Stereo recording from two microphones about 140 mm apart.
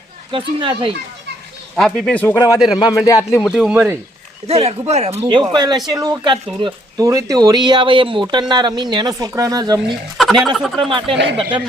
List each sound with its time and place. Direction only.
0.3 s speech: 35° right (ahead or behind)
1.7 s speech: 5° left (ahead or behind)
2.3 s a man's voice: 20° left (ahead or behind)
3.4 s fowl: centre (ahead or behind)
4.4 s speech: 45° right (ahead or behind)
5.3 s speech: 35° right (ahead or behind)
7.0 s speech: 25° right (ahead or behind)
10.2 s fowl: centre (ahead or behind)
10.8 s speech: 40° right (ahead or behind)